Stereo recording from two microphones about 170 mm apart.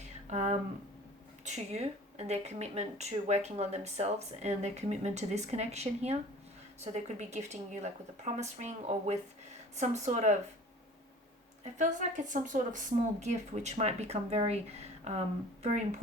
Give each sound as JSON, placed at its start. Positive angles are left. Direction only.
{"t": 0.3, "sound": "a woman's voice", "side_deg": -40}
{"t": 11.6, "sound": "a woman's voice", "side_deg": -45}